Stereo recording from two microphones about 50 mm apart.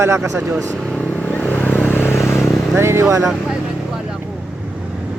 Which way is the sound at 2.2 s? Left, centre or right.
Left.